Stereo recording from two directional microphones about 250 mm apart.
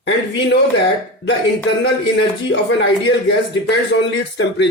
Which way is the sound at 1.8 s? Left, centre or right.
Left.